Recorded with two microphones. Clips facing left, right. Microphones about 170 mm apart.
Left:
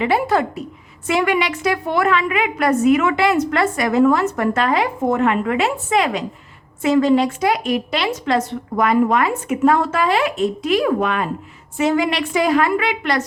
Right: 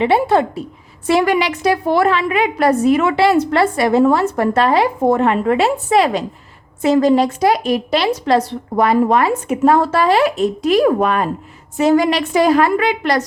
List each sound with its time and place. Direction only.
0.0 s a woman's voice: 25° right (ahead or behind)